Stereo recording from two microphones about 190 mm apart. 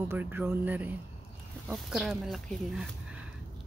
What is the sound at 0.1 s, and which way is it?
A woman's voice, 10° right (ahead or behind).